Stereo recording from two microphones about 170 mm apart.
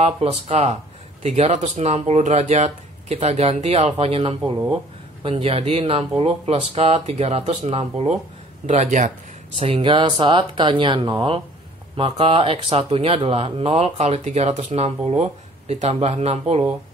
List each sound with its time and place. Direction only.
0.0 s speech: 40° right (ahead or behind)
9.6 s speech: 35° right (ahead or behind)